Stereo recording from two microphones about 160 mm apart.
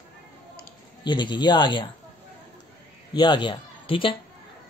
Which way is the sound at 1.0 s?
30° left (ahead or behind).